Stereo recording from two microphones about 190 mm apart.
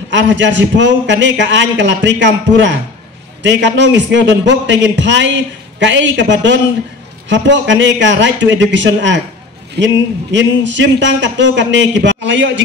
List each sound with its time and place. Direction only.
0.1 s a man's voice: 70° right (ahead or behind)
10.3 s a man's voice: 70° right (ahead or behind)